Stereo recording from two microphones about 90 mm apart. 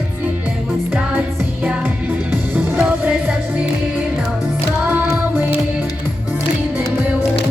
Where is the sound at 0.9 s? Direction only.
20° right (ahead or behind).